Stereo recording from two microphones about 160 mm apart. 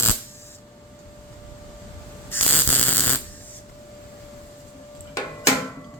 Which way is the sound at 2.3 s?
10° left (ahead or behind).